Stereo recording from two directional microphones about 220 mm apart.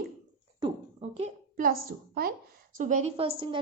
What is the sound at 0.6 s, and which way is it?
A woman's voice, 30° right (ahead or behind).